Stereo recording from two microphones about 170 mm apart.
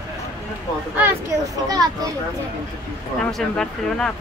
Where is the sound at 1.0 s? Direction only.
15° right (ahead or behind).